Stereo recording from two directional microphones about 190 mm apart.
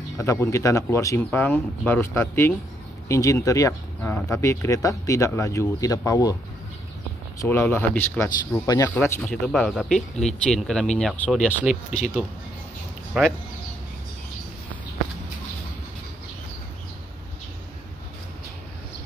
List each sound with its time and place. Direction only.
0.2 s speech: 15° left (ahead or behind)
7.4 s speech: 10° left (ahead or behind)
13.2 s speech: 5° right (ahead or behind)